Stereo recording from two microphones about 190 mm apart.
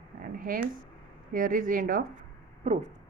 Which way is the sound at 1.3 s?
45° right (ahead or behind).